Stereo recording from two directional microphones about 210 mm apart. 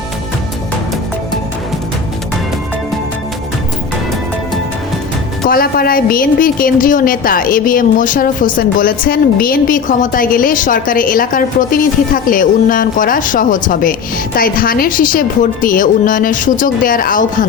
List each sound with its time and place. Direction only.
5.5 s a woman's voice: 45° left (ahead or behind)